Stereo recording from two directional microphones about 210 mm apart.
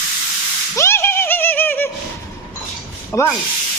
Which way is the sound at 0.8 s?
10° left (ahead or behind).